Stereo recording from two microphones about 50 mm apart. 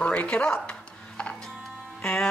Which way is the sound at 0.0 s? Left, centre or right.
Left.